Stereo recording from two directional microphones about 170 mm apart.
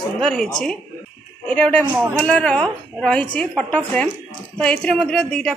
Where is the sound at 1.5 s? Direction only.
5° left (ahead or behind).